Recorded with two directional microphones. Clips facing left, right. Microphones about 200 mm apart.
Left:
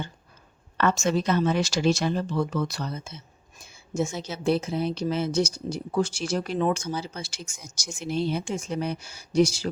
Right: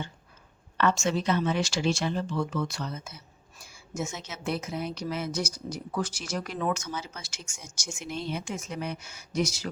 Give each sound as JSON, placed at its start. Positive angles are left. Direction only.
{"t": 0.8, "sound": "speech", "side_deg": 45}